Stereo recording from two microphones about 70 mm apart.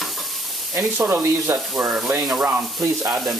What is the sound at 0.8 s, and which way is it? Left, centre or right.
Speech, right.